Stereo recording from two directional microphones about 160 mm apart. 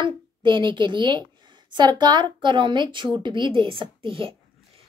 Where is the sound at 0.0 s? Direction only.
30° right (ahead or behind).